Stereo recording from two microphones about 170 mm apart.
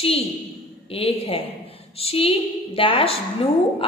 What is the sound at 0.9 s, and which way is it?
A woman's voice, 35° left (ahead or behind).